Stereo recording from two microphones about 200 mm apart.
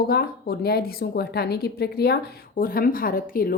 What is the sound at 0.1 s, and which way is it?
A woman's voice, 50° left (ahead or behind).